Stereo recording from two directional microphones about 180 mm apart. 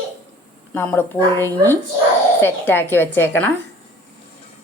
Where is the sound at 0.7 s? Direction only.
10° left (ahead or behind).